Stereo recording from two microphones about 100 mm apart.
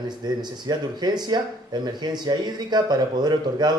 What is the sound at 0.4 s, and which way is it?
Speech, 45° right (ahead or behind).